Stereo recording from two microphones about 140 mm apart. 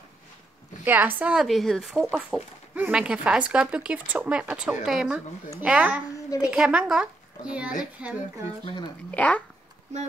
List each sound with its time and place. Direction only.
0.8 s speech: 15° right (ahead or behind)
8.6 s speech: 35° left (ahead or behind)
9.1 s speech: 10° left (ahead or behind)